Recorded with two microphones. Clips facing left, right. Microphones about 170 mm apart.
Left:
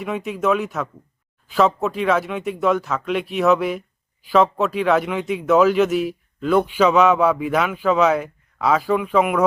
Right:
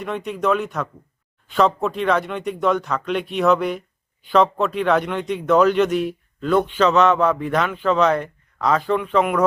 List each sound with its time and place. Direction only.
0.0 s speech: 5° left (ahead or behind)